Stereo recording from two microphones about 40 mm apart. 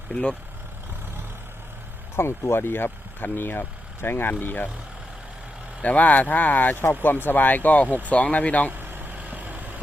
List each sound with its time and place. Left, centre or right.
0.1 s speech: left
2.1 s speech: left
4.4 s speech: left
5.8 s speech: left
7.0 s speech: left
8.7 s vehicle: right